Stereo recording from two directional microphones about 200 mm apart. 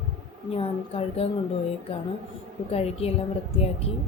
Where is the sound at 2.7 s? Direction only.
30° left (ahead or behind).